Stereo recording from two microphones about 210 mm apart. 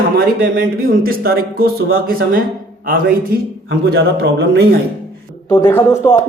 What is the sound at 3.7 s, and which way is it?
Speech, 55° right (ahead or behind).